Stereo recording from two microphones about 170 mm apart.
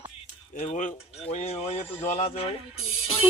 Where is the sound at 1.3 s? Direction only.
40° left (ahead or behind).